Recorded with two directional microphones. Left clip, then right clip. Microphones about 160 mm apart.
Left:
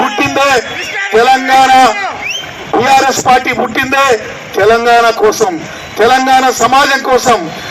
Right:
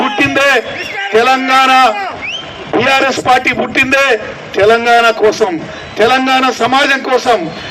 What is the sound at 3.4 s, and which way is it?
A man's voice, 15° right (ahead or behind).